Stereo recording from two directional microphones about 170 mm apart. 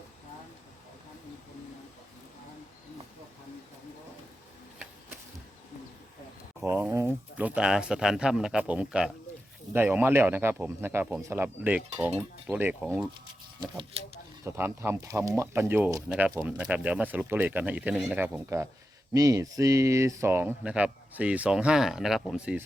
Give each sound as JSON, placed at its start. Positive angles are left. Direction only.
{"t": 6.7, "sound": "speech", "side_deg": -10}
{"t": 14.4, "sound": "speech", "side_deg": -15}